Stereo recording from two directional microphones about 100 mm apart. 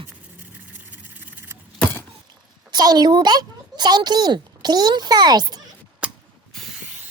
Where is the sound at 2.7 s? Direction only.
40° right (ahead or behind).